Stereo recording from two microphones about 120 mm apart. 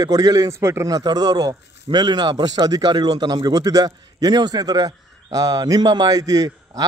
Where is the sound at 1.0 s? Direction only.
35° right (ahead or behind).